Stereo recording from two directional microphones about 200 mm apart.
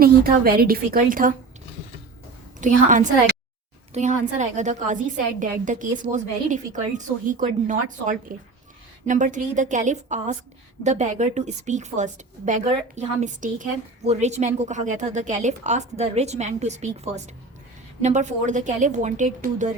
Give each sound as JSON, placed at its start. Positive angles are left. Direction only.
{"t": 0.0, "sound": "a woman's voice", "side_deg": -50}
{"t": 2.6, "sound": "a woman's voice", "side_deg": -40}